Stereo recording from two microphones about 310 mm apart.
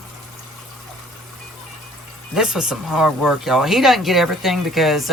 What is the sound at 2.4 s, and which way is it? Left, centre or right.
Speech, centre.